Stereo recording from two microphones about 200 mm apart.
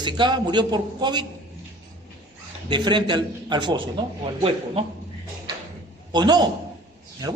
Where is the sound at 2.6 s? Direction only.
20° right (ahead or behind).